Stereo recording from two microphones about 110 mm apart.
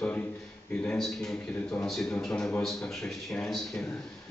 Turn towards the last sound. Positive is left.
turn(degrees=5)  # may be behind; listen again after turning